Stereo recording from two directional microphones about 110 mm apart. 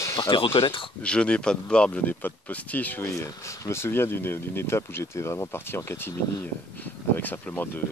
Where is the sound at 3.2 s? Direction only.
25° left (ahead or behind).